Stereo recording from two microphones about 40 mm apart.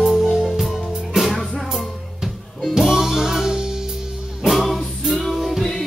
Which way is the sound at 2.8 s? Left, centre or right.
Centre.